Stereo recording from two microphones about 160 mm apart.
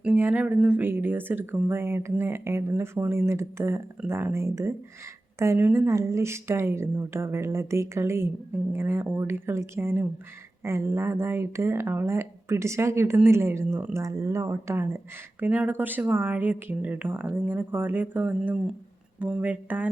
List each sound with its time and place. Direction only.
0.0 s speech: 10° right (ahead or behind)